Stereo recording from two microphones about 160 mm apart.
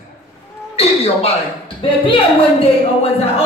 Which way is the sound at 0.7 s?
40° left (ahead or behind).